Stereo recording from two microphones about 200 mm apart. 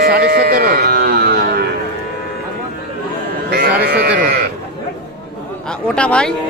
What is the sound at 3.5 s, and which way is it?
Speech, 50° right (ahead or behind).